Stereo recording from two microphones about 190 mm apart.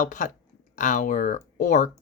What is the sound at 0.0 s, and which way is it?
Speech, 40° left (ahead or behind).